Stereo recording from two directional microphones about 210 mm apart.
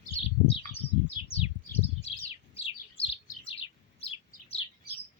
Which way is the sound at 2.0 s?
30° left (ahead or behind).